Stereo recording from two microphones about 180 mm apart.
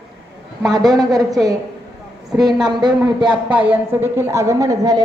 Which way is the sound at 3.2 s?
5° right (ahead or behind).